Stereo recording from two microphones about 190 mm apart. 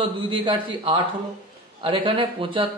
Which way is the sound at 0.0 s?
25° right (ahead or behind).